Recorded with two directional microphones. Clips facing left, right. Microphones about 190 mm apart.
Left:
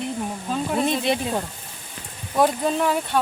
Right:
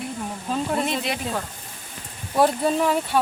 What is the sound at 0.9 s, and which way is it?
Speech, 25° left (ahead or behind).